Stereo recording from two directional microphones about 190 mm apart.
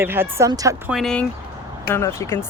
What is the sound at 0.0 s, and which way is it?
Speech, 10° right (ahead or behind).